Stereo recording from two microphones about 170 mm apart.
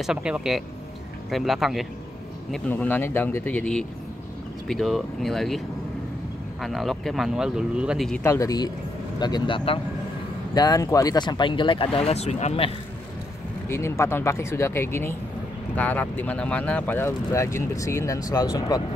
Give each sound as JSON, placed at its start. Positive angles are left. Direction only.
{"t": 0.0, "sound": "speech", "side_deg": -5}
{"t": 6.6, "sound": "speech", "side_deg": 0}
{"t": 8.2, "sound": "speech", "side_deg": 20}
{"t": 13.7, "sound": "speech", "side_deg": 15}